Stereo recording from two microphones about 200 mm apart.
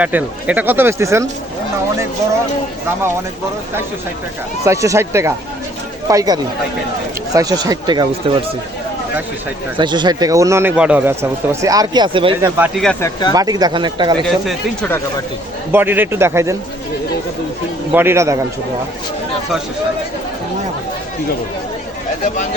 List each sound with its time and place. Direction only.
0.0 s speech: 10° right (ahead or behind)
4.6 s speech: 15° right (ahead or behind)
9.7 s speech: 25° right (ahead or behind)
12.5 s speech: 10° right (ahead or behind)
12.8 s speech: 5° left (ahead or behind)
13.3 s speech: 20° right (ahead or behind)
14.3 s speech: 5° left (ahead or behind)
15.7 s speech: 10° right (ahead or behind)
17.9 s speech: 10° right (ahead or behind)